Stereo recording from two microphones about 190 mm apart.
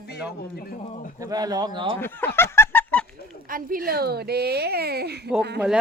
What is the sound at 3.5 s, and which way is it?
Speech, 50° right (ahead or behind).